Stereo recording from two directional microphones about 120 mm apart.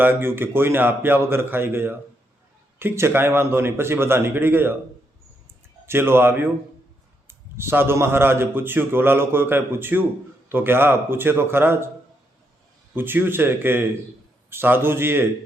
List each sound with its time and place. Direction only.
0.0 s a man's voice: 20° right (ahead or behind)
5.8 s a man's voice: 20° right (ahead or behind)
12.9 s a man's voice: 15° right (ahead or behind)